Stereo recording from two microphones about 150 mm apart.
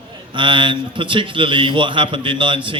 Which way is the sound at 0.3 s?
35° right (ahead or behind).